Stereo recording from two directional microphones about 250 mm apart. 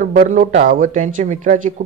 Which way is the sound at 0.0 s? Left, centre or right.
Right.